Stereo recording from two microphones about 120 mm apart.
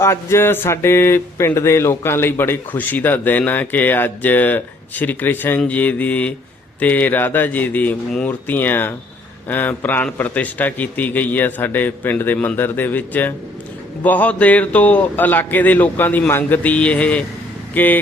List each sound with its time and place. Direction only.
0.0 s speech: 20° left (ahead or behind)